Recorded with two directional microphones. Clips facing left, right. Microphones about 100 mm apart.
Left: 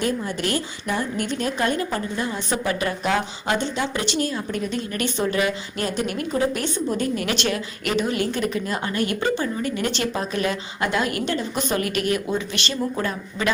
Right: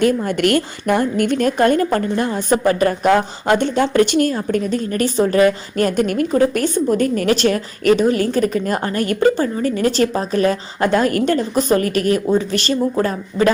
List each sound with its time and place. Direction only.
0.3 s a woman's voice: 60° right (ahead or behind); by 13.5 s 40° right (ahead or behind)